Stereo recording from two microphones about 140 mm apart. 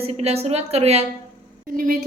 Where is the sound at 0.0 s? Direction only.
45° right (ahead or behind).